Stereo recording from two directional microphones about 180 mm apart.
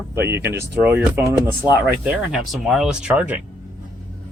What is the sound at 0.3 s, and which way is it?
Speech, 15° right (ahead or behind).